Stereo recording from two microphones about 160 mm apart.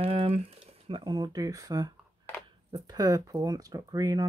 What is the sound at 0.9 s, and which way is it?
Speech, 30° right (ahead or behind).